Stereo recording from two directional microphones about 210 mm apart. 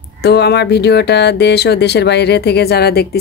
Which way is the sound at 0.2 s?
50° left (ahead or behind).